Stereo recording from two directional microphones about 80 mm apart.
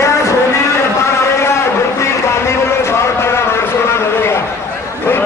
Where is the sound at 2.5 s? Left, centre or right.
Left.